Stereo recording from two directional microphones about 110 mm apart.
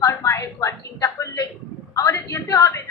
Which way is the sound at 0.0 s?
30° left (ahead or behind).